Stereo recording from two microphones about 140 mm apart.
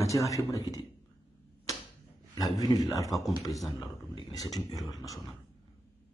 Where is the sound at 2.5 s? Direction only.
25° left (ahead or behind).